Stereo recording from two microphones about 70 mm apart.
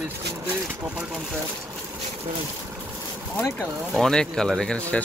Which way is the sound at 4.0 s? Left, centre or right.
Centre.